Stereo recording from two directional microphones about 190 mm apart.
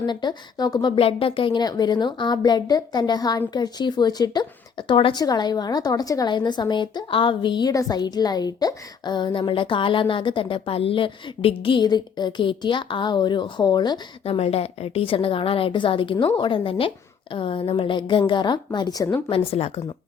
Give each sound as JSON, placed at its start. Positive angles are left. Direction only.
{"t": 0.0, "sound": "a woman's voice", "side_deg": 25}
{"t": 19.3, "sound": "speech", "side_deg": 30}